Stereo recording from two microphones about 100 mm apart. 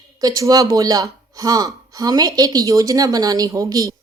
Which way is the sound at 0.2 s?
40° right (ahead or behind).